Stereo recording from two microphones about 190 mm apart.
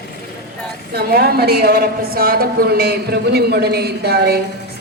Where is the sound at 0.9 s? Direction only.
55° right (ahead or behind).